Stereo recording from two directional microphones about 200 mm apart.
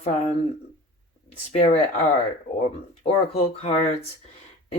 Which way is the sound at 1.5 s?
35° left (ahead or behind).